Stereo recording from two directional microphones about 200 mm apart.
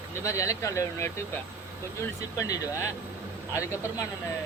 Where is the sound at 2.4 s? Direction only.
15° left (ahead or behind).